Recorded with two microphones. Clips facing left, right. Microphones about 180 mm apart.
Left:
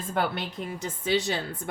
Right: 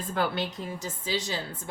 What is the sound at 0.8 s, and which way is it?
Speech, 65° left (ahead or behind).